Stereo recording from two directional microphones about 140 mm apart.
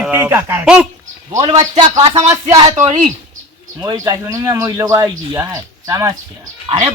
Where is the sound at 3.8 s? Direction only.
25° right (ahead or behind).